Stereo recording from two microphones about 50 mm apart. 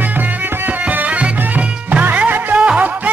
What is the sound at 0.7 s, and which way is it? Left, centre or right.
Music, right.